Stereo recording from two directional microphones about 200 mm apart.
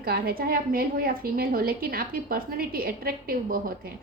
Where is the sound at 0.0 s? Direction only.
50° right (ahead or behind).